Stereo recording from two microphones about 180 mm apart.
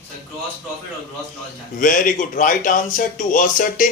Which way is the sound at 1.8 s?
45° left (ahead or behind).